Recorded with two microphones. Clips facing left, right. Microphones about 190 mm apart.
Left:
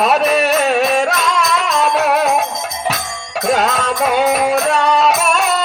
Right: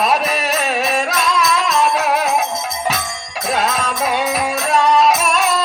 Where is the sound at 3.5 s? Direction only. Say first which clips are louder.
Left 4 dB; 65° left (ahead or behind).